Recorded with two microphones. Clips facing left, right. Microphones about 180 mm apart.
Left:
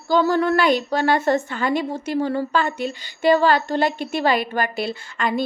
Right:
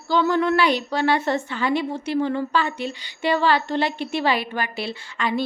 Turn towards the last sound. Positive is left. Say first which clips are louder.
# left 2 dB
turn(degrees=45)  # may be behind; listen again after turning